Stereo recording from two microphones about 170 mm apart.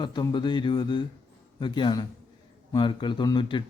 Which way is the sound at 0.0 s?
25° left (ahead or behind).